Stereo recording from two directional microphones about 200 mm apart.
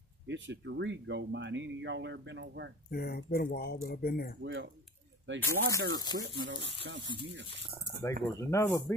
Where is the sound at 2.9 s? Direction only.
50° left (ahead or behind).